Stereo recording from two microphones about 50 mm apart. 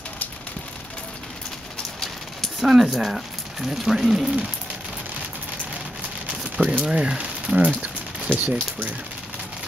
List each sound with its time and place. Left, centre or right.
2.6 s speech: centre
6.8 s speech: centre
7.6 s a sound: right